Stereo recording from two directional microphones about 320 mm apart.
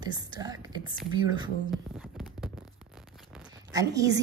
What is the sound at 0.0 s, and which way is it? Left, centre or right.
Speech, centre.